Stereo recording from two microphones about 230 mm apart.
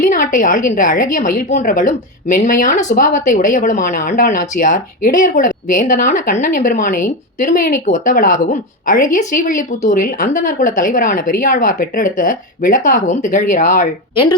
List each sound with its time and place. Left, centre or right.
0.0 s a woman's voice: left